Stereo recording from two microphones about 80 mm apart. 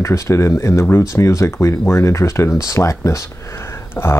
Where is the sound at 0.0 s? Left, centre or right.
Left.